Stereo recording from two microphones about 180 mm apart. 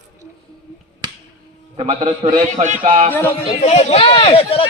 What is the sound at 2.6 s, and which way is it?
Speech, 45° right (ahead or behind).